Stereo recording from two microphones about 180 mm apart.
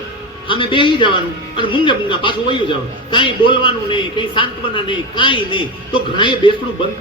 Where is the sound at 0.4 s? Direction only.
25° left (ahead or behind).